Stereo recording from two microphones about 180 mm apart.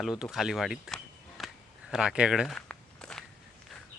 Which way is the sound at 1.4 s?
Centre (ahead or behind).